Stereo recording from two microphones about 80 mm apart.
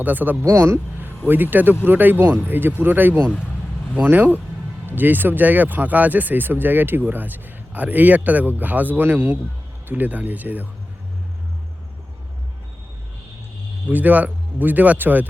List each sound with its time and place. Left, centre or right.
0.0 s speech: right
0.4 s speech: right
13.8 s speech: right